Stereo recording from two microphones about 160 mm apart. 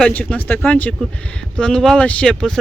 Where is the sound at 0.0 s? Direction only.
10° left (ahead or behind).